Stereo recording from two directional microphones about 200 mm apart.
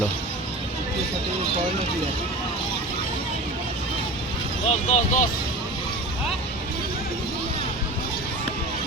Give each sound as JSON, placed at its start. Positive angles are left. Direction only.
{"t": 4.6, "sound": "speech", "side_deg": 35}